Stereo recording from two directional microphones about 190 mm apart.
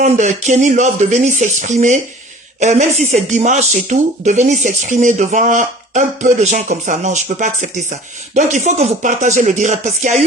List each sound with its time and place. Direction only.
0.0 s speech: 40° right (ahead or behind)